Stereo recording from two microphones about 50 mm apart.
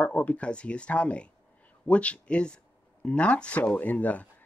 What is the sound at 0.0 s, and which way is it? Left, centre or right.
Speech, left.